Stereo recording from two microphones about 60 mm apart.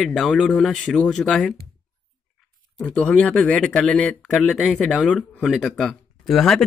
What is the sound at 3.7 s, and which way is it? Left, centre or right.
Speech, centre.